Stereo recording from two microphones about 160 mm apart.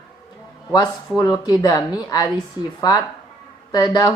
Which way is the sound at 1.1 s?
25° left (ahead or behind).